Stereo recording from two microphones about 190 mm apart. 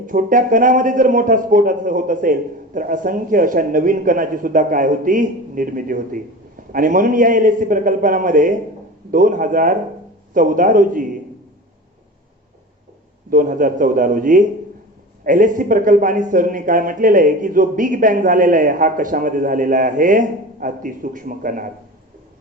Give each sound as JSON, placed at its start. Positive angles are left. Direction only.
{"t": 0.0, "sound": "speech", "side_deg": -45}
{"t": 13.3, "sound": "speech", "side_deg": -45}